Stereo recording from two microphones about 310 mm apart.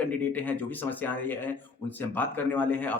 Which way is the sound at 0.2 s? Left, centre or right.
Centre.